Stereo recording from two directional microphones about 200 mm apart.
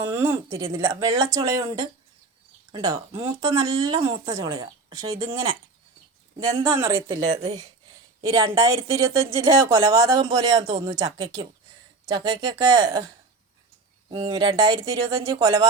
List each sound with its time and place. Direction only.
0.0 s speech: 10° right (ahead or behind)
3.4 s speech: 30° right (ahead or behind)
4.0 s speech: 15° right (ahead or behind)
6.5 s speech: 15° right (ahead or behind)
7.3 s speech: 30° right (ahead or behind)
8.2 s speech: 15° right (ahead or behind)
14.1 s speech: 25° right (ahead or behind)